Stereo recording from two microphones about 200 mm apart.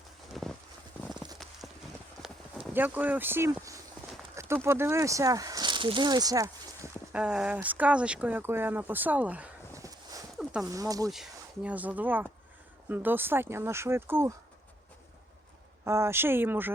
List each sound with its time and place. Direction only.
0.4 s a sound: centre (ahead or behind)
1.4 s clip-clop: centre (ahead or behind)
2.7 s speech: 10° right (ahead or behind)
7.1 s speech: 5° right (ahead or behind)
10.3 s a sound: centre (ahead or behind)
10.7 s speech: 15° right (ahead or behind)
11.1 s speech: 5° right (ahead or behind)
15.8 s speech: 15° right (ahead or behind)